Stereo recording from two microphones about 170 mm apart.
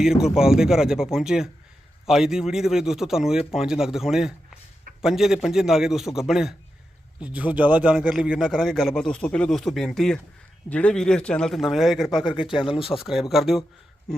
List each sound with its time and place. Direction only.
0.0 s a man's voice: 5° right (ahead or behind)
12.4 s speech: 30° left (ahead or behind)
13.0 s a man's voice: centre (ahead or behind)